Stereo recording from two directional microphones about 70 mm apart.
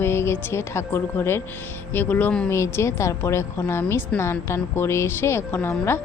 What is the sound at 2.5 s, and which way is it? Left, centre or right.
A woman's voice, left.